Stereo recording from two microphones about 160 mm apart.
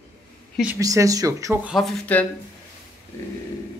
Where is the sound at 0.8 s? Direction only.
20° right (ahead or behind).